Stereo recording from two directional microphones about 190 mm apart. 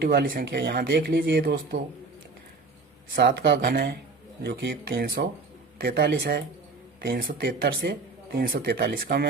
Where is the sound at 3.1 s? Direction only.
55° right (ahead or behind).